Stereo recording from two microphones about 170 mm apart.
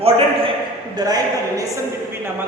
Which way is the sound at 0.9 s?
20° right (ahead or behind).